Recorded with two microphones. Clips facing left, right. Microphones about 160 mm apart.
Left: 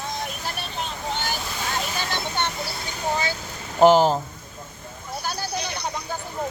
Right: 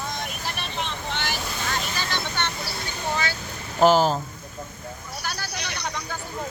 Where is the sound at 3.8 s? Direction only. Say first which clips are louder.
Left 3 dB; 20° left (ahead or behind).